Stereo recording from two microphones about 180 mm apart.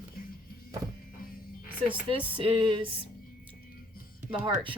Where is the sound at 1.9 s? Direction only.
30° right (ahead or behind).